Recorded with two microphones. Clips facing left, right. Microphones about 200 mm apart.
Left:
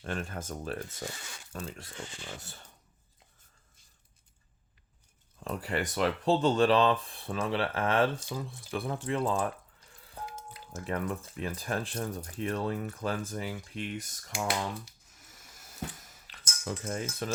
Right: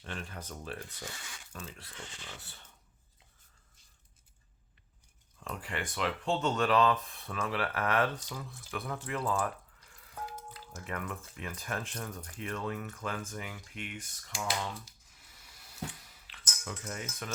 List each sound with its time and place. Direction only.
0.0 s speech: 45° left (ahead or behind)
5.4 s speech: 35° left (ahead or behind)
15.2 s dishes: 45° left (ahead or behind)